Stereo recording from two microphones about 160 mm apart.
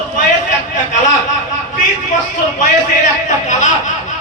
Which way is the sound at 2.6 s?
50° left (ahead or behind).